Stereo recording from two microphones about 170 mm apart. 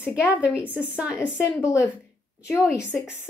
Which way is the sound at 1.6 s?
20° left (ahead or behind).